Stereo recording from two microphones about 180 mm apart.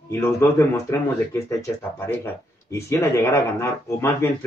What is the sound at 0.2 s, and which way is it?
Speech, 15° left (ahead or behind).